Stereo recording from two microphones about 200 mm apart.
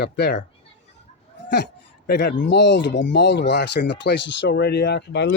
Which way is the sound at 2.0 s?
55° left (ahead or behind).